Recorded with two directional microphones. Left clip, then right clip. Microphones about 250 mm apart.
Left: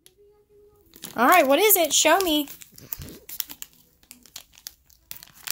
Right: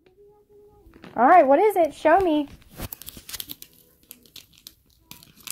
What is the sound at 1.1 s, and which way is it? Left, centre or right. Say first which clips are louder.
Speech: right 2 dB; left.